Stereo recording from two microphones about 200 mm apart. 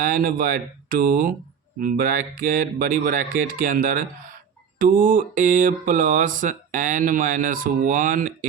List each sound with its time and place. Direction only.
0.0 s speech: 45° right (ahead or behind)